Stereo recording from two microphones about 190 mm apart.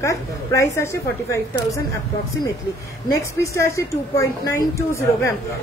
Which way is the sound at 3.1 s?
15° left (ahead or behind).